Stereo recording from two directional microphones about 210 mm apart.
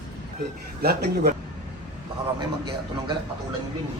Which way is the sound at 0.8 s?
50° right (ahead or behind).